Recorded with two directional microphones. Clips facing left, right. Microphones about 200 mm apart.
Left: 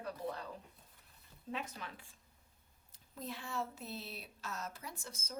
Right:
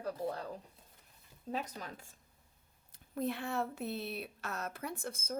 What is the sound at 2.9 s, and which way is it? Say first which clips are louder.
Speech: right 10 dB; 60° right (ahead or behind).